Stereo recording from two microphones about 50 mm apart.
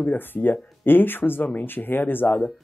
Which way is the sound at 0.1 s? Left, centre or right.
Left.